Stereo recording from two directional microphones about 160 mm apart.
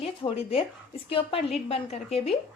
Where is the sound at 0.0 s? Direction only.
40° left (ahead or behind).